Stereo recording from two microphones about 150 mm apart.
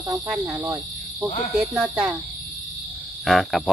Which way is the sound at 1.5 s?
5° right (ahead or behind).